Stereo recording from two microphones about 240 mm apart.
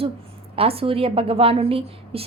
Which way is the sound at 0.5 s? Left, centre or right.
Right.